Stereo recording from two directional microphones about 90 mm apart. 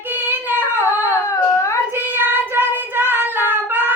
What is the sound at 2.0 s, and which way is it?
Singing, 25° right (ahead or behind).